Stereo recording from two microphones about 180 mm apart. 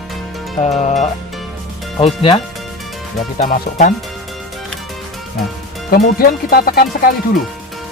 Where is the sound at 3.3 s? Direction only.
45° left (ahead or behind).